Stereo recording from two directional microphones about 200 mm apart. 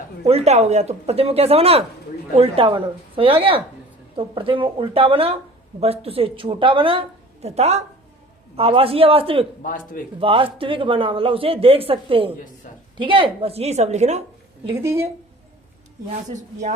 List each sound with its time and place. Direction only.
0.3 s a man's voice: 30° right (ahead or behind)
9.6 s a man's voice: 45° left (ahead or behind)
10.2 s a man's voice: 25° right (ahead or behind)
12.7 s a woman's voice: 40° left (ahead or behind)
13.0 s speech: 25° right (ahead or behind)
14.8 s speech: 10° right (ahead or behind)
16.3 s speech: 35° right (ahead or behind)